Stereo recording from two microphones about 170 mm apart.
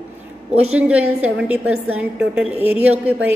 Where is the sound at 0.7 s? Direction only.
10° right (ahead or behind).